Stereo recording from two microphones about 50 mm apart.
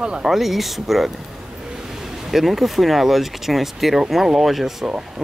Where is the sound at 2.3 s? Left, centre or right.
Centre.